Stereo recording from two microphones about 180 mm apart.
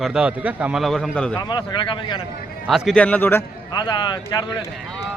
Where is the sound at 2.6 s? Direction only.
Centre (ahead or behind).